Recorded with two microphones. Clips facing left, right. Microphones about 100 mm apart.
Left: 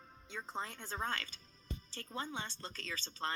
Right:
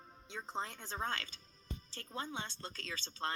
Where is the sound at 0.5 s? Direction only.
Centre (ahead or behind).